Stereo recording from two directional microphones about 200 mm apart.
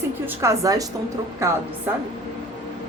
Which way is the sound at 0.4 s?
15° right (ahead or behind).